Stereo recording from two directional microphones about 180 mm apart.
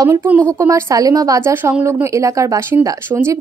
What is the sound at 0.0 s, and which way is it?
A woman's voice, 15° right (ahead or behind).